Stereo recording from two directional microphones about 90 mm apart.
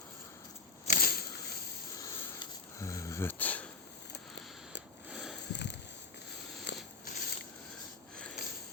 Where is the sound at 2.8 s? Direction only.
35° left (ahead or behind).